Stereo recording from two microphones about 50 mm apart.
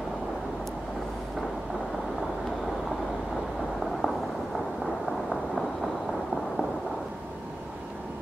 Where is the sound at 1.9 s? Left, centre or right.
Centre.